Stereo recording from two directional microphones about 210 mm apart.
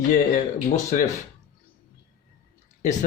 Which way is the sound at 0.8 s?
35° left (ahead or behind).